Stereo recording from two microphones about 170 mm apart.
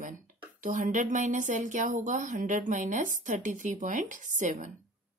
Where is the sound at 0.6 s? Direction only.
50° right (ahead or behind).